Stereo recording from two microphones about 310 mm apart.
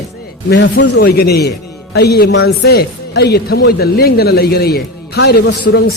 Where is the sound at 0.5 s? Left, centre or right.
Left.